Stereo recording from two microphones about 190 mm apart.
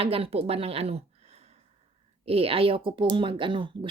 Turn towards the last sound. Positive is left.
turn(degrees=-25)  # may be behind; listen again after turning